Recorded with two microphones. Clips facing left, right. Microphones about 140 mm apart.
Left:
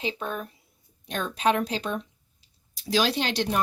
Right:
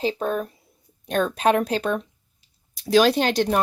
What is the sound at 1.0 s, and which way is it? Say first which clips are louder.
Speech: right 5 dB; 50° right (ahead or behind).